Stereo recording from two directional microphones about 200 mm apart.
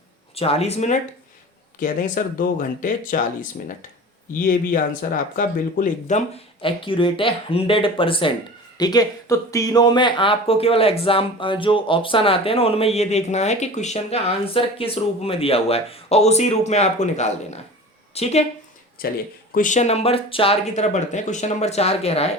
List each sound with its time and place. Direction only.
0.3 s speech: 30° left (ahead or behind)
4.4 s speech: 45° left (ahead or behind)
19.0 s speech: 45° left (ahead or behind); by 22.3 s 30° left (ahead or behind)